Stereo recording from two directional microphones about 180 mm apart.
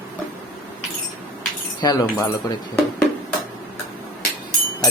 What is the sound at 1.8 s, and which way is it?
Speech, 20° left (ahead or behind).